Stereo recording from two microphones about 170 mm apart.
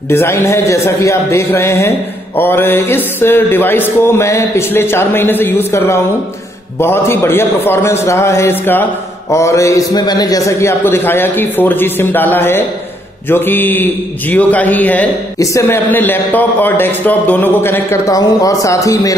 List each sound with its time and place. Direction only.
0.1 s a man's voice: 15° left (ahead or behind)